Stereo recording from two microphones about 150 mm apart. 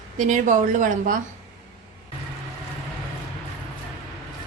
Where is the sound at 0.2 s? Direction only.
55° right (ahead or behind).